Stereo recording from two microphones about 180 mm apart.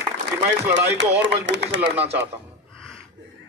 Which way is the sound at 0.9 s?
85° right.